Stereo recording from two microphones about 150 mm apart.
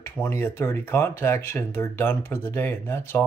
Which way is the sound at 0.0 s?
15° left (ahead or behind).